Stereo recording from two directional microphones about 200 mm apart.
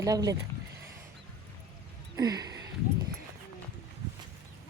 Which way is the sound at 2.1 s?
20° right (ahead or behind).